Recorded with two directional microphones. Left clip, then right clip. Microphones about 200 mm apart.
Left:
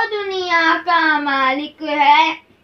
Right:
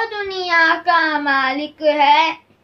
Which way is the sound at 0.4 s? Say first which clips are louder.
Right 1 dB; 25° right (ahead or behind).